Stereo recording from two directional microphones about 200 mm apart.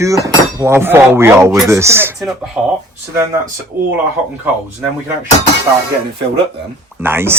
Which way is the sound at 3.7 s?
10° right (ahead or behind).